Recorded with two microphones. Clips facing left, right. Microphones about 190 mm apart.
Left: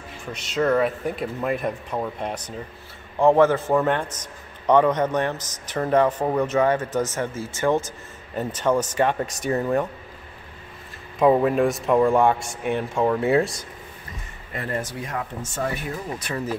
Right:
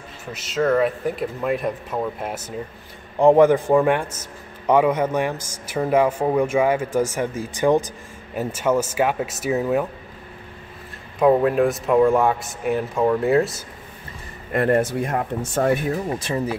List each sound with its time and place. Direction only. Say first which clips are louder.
0.2 s a man's voice: right 1 dB; centre (ahead or behind)
11.1 s speech: right 1 dB; centre (ahead or behind)
14.5 s speech: right 10 dB; 55° right (ahead or behind)
16.1 s speech: right 5 dB; 25° right (ahead or behind)